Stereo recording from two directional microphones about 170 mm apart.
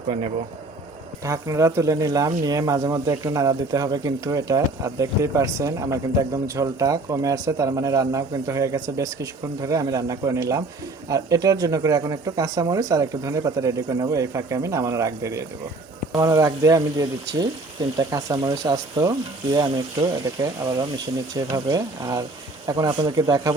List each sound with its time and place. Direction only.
1.2 s speech: 20° right (ahead or behind)